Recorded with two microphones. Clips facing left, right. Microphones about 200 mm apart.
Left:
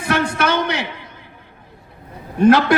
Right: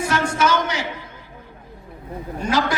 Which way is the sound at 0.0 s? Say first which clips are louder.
Left 1 dB; 60° left (ahead or behind).